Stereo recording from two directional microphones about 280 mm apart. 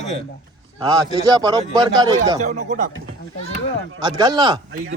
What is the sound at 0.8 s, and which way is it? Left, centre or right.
A man's voice, centre.